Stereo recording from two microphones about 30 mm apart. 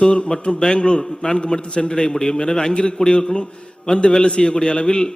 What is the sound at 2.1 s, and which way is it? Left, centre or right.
A man's voice, centre.